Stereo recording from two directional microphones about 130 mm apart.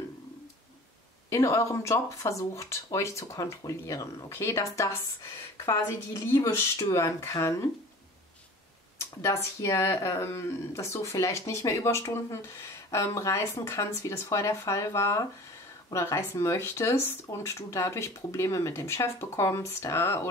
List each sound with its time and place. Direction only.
1.3 s speech: 25° left (ahead or behind)
6.3 s speech: 20° left (ahead or behind)
8.9 s speech: 20° left (ahead or behind)